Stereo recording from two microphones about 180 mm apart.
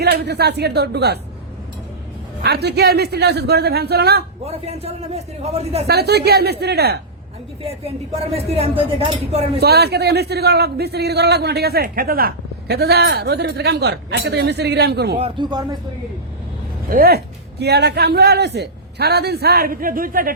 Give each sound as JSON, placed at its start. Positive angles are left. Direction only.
{"t": 0.0, "sound": "a man's voice", "side_deg": -65}
{"t": 2.4, "sound": "a man's voice", "side_deg": -65}
{"t": 4.4, "sound": "speech", "side_deg": -35}
{"t": 5.9, "sound": "a man's voice", "side_deg": -65}
{"t": 7.6, "sound": "speech", "side_deg": -35}
{"t": 9.6, "sound": "a man's voice", "side_deg": -65}
{"t": 15.2, "sound": "speech", "side_deg": -25}
{"t": 16.9, "sound": "a man's voice", "side_deg": -55}